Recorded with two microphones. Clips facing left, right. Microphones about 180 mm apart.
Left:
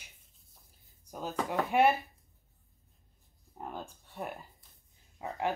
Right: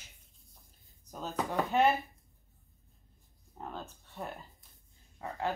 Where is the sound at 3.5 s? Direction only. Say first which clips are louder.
Left 1 dB; 10° left (ahead or behind).